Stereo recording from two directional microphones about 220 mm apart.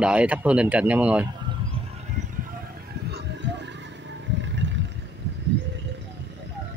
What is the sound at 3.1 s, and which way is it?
Vehicle, 50° right (ahead or behind).